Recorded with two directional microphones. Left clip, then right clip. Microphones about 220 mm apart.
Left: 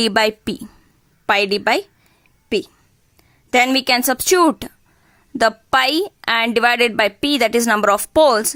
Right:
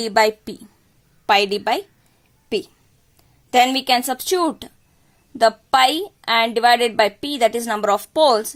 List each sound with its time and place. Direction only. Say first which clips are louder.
0.0 s a woman's voice: left 1 dB; 25° left (ahead or behind)